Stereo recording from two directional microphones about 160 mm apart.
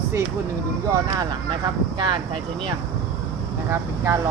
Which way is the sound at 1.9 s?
30° right (ahead or behind).